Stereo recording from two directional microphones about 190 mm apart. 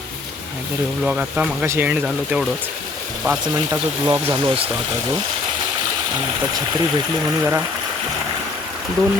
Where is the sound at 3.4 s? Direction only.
20° right (ahead or behind).